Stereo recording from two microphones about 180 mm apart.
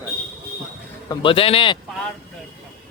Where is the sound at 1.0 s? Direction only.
30° left (ahead or behind).